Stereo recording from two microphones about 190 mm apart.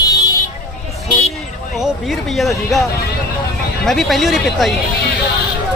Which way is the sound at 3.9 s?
Centre (ahead or behind).